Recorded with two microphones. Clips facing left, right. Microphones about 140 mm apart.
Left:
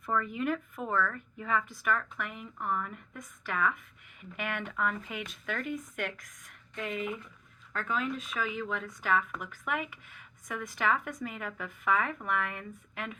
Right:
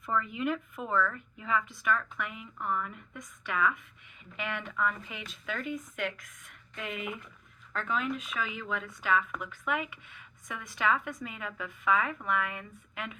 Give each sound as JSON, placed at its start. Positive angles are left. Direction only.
{"t": 0.1, "sound": "speech", "side_deg": 45}
{"t": 4.2, "sound": "speech", "side_deg": 50}